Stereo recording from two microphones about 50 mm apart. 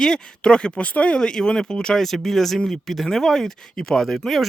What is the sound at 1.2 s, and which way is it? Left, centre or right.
Speech, centre.